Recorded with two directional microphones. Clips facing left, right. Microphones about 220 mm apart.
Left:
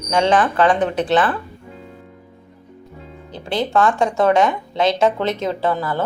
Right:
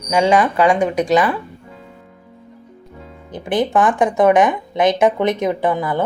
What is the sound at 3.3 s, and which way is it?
Speech, 20° right (ahead or behind).